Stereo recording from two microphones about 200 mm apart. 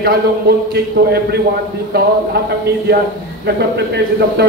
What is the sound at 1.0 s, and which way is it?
A man's voice, 45° right (ahead or behind).